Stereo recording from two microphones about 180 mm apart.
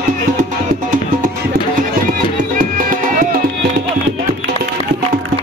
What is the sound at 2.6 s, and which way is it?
Music, 50° right (ahead or behind).